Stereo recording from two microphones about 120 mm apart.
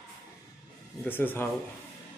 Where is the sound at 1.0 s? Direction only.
15° left (ahead or behind).